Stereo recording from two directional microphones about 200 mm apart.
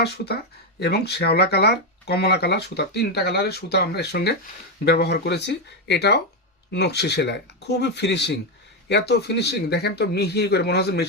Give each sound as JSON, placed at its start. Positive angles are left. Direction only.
{"t": 0.8, "sound": "speech", "side_deg": 55}